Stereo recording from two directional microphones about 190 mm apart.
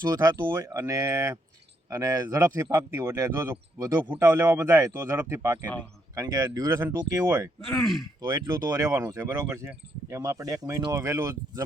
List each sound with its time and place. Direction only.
0.0 s speech: 20° right (ahead or behind)
7.6 s speech: centre (ahead or behind)
8.2 s speech: 20° right (ahead or behind)